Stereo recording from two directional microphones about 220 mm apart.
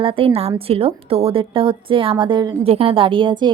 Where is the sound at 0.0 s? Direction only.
25° right (ahead or behind).